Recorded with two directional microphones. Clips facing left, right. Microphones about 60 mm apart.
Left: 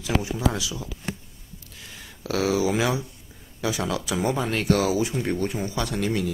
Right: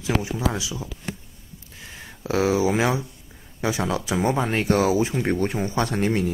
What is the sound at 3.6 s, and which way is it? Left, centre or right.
Speech, right.